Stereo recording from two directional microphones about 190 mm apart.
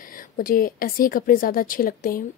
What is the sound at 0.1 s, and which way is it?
A woman's voice, 50° left (ahead or behind).